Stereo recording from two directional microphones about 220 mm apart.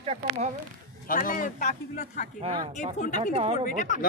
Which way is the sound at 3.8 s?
35° left (ahead or behind).